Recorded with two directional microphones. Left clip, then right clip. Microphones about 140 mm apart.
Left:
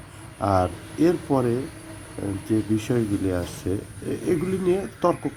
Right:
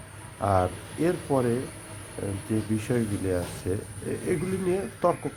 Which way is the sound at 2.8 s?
10° left (ahead or behind).